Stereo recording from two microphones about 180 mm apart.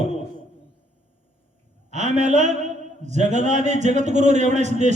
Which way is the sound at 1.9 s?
40° right (ahead or behind).